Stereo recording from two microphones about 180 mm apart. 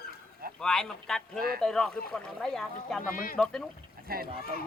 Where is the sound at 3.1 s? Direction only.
50° left (ahead or behind).